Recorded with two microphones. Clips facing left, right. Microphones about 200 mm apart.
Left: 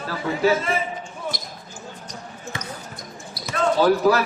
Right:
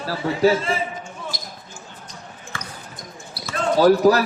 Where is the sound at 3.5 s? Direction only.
40° right (ahead or behind).